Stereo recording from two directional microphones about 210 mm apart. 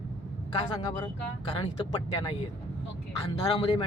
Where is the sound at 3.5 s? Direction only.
20° left (ahead or behind).